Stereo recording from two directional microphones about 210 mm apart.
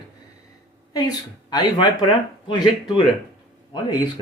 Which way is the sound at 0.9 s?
20° left (ahead or behind).